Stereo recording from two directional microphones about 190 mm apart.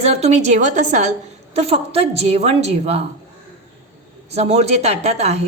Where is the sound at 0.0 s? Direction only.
35° right (ahead or behind).